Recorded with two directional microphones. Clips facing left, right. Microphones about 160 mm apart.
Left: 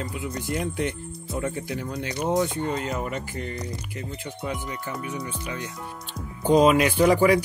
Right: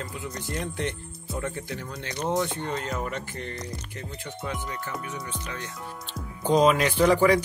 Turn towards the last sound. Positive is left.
turn(degrees=10)  # may be behind; listen again after turning